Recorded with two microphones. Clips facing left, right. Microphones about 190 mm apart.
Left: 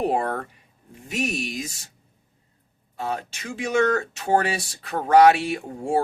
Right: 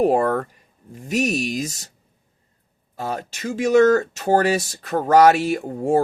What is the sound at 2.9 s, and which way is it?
Speech, 40° right (ahead or behind).